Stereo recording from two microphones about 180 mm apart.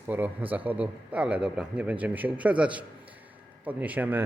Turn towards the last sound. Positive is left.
turn(degrees=-10)  # may be behind; listen again after turning